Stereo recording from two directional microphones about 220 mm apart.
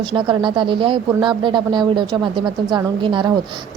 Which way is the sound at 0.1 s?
20° right (ahead or behind).